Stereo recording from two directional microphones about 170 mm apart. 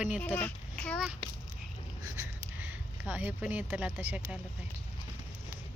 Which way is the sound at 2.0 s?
15° right (ahead or behind).